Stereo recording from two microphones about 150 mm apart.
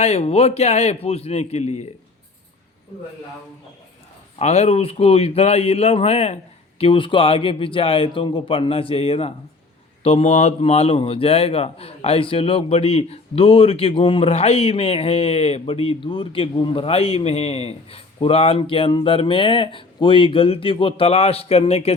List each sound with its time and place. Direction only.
0.0 s speech: 45° left (ahead or behind)
4.4 s a man's voice: 45° left (ahead or behind)